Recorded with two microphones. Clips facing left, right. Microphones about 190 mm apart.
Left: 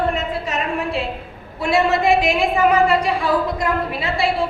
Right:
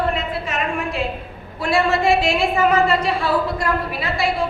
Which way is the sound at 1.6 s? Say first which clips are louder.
Left 1 dB; 20° left (ahead or behind).